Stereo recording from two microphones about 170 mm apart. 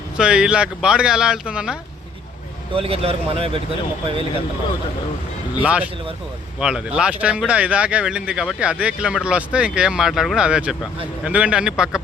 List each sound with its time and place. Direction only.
0.2 s speech: 5° right (ahead or behind)
2.7 s speech: 35° right (ahead or behind)
5.6 s speech: 5° right (ahead or behind)